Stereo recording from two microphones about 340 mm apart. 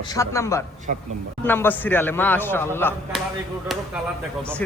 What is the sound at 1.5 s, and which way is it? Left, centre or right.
Speech, centre.